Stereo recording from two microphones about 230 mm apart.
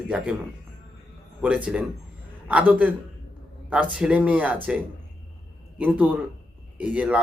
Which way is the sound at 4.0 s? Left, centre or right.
Centre.